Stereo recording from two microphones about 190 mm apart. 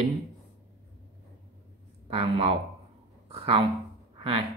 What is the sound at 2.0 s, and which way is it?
Speech, 30° right (ahead or behind).